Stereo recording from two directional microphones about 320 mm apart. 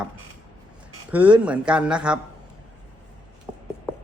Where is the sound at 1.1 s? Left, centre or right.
Centre.